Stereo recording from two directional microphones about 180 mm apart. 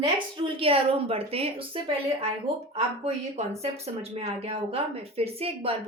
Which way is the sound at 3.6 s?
35° right (ahead or behind).